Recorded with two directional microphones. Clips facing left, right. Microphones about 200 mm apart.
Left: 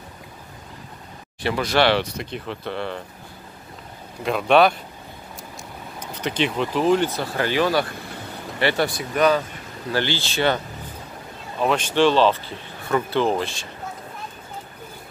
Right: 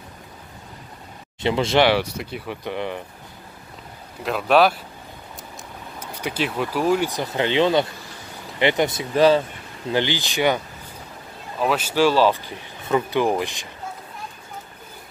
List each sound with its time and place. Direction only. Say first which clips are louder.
1.4 s speech: right 2 dB; 25° right (ahead or behind)
1.9 s speech: right 1 dB; 10° right (ahead or behind)
4.2 s speech: left 1 dB; centre (ahead or behind)
5.9 s speech: left 2 dB; 10° right (ahead or behind); by 9.4 s 30° right (ahead or behind)
9.8 s speech: right 2 dB; 15° right (ahead or behind)
11.6 s speech: left 1 dB; 5° right (ahead or behind)